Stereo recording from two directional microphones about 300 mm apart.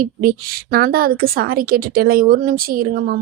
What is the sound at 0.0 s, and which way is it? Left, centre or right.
A woman's voice, right.